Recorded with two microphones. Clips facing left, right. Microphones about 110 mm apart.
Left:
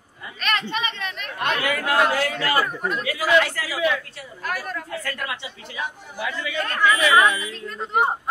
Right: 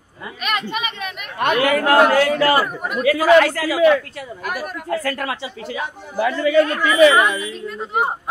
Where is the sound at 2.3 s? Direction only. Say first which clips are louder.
Right 9 dB; 45° right (ahead or behind).